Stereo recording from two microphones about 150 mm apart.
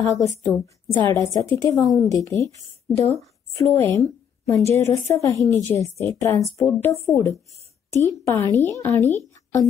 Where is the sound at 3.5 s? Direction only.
15° left (ahead or behind).